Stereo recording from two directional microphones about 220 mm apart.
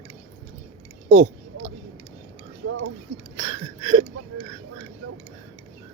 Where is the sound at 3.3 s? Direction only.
25° right (ahead or behind).